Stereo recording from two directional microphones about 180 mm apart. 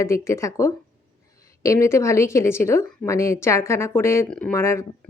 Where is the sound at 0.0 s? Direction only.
15° left (ahead or behind).